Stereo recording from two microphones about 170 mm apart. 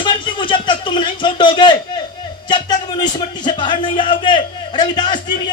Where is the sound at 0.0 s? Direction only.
30° left (ahead or behind).